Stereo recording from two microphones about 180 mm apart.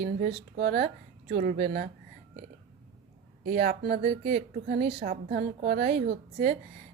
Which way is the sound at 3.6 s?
55° right (ahead or behind).